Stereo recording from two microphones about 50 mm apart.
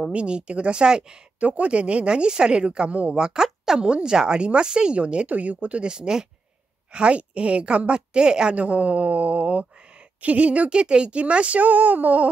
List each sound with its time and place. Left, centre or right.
0.1 s a woman's voice: right
1.4 s a woman's voice: right
3.4 s a sound: centre
3.8 s a woman's voice: centre